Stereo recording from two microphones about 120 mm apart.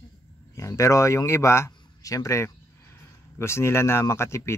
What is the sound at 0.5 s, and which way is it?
A man's voice, 25° left (ahead or behind).